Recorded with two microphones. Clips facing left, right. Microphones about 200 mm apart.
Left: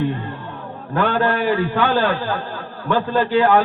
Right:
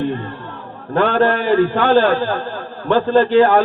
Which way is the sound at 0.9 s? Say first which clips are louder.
Right 4 dB; 45° right (ahead or behind).